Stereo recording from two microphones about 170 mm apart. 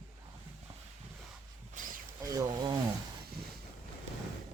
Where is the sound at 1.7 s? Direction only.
50° right (ahead or behind).